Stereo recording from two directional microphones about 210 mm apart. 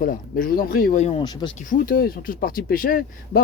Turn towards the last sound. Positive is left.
turn(degrees=45)  # may be behind; listen again after turning